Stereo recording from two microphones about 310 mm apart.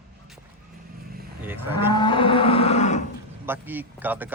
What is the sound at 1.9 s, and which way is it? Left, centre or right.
Livestock, centre.